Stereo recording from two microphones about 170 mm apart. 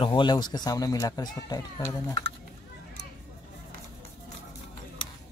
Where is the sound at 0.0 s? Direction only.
25° left (ahead or behind).